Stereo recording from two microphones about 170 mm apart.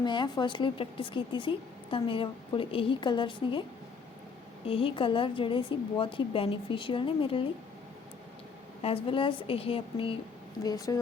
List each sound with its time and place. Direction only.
0.0 s a woman's voice: 25° left (ahead or behind)
4.6 s speech: 30° left (ahead or behind)
8.8 s speech: 35° left (ahead or behind)
10.6 s a woman's voice: 20° left (ahead or behind)